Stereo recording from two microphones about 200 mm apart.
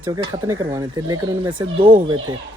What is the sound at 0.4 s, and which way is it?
Speech, 15° right (ahead or behind).